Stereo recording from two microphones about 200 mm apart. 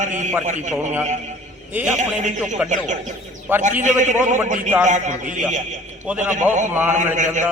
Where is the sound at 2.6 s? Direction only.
5° right (ahead or behind).